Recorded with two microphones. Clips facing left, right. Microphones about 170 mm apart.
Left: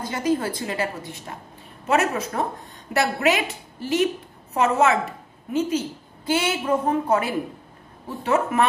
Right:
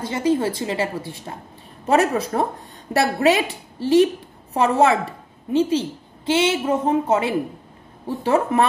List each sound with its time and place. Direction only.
0.0 s a woman's voice: 25° right (ahead or behind)